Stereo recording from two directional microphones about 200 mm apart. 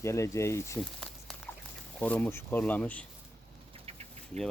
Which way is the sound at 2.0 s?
10° left (ahead or behind).